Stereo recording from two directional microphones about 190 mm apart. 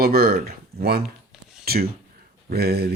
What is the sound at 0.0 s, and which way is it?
Speech, 55° right (ahead or behind).